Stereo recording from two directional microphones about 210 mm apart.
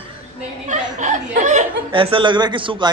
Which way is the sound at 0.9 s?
35° right (ahead or behind).